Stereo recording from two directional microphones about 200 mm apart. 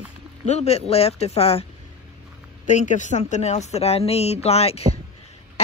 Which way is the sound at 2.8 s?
35° left (ahead or behind).